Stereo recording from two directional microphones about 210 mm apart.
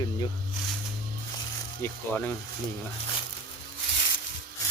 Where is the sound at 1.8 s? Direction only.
10° left (ahead or behind).